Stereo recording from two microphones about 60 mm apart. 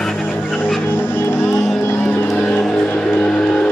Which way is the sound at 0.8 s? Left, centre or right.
Left.